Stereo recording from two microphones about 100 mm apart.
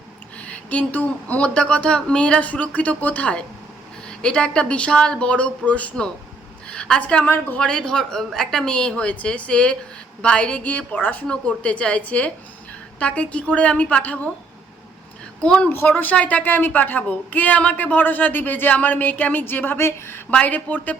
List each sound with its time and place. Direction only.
0.4 s a woman's voice: 10° left (ahead or behind)
15.4 s a woman's voice: 10° left (ahead or behind)
15.7 s a woman's voice: 20° left (ahead or behind)